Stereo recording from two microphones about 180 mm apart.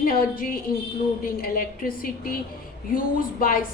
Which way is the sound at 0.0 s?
55° left (ahead or behind).